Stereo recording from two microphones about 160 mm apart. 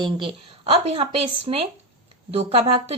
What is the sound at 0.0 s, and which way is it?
A woman's voice, 30° right (ahead or behind).